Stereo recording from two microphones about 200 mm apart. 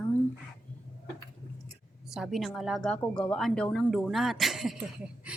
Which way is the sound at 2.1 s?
Centre (ahead or behind).